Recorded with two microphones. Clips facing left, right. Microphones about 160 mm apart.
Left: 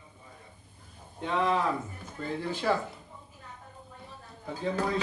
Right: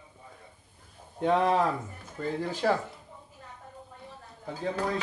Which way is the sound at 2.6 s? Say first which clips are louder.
Right 2 dB; 50° right (ahead or behind).